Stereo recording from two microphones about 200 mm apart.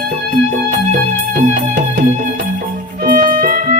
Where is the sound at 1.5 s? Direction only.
45° right (ahead or behind).